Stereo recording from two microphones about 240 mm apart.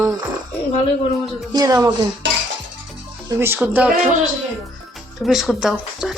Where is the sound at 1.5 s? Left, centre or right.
Centre.